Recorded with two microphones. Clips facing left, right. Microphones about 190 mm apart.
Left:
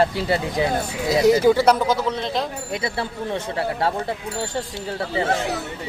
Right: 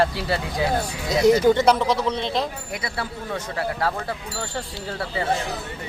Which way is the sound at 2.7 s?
25° left (ahead or behind).